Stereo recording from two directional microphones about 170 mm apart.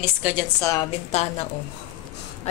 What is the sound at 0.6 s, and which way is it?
Speech, 20° left (ahead or behind).